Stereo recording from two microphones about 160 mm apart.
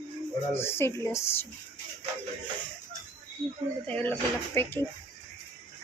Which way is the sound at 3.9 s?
10° left (ahead or behind).